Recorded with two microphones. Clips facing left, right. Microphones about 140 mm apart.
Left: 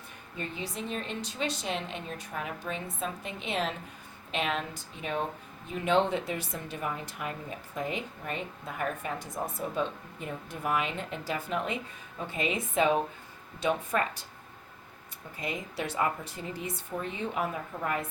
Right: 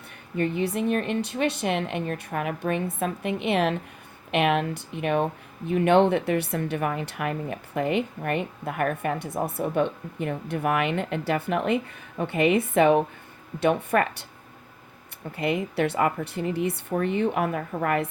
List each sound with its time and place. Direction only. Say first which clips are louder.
0.3 s speech: right 12 dB; 60° right (ahead or behind)
15.4 s speech: right 10 dB; 65° right (ahead or behind)